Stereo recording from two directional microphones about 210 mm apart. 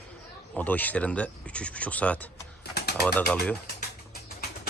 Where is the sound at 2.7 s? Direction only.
50° left (ahead or behind).